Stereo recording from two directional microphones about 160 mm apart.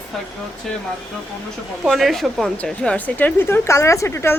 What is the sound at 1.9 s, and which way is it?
A woman's voice, centre (ahead or behind).